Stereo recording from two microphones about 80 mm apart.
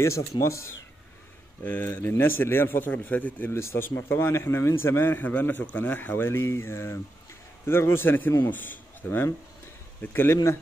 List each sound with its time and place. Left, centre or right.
0.4 s speech: left
1.6 s a man's voice: left